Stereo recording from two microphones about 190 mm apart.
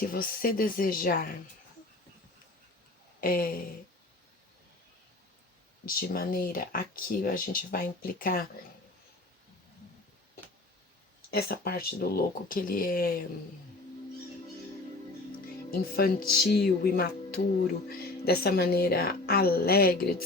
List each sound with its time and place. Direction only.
0.0 s speech: 50° left (ahead or behind)
3.2 s a sound: 50° left (ahead or behind)
5.8 s speech: 50° left (ahead or behind)
11.3 s speech: 55° left (ahead or behind)
15.7 s speech: 50° left (ahead or behind)